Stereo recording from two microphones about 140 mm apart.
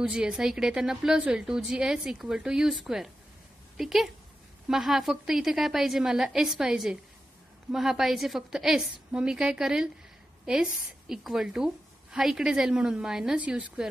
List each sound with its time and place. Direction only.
0.0 s a woman's voice: 5° right (ahead or behind)